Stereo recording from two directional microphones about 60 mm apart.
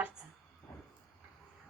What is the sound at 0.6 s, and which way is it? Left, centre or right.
Vehicle, centre.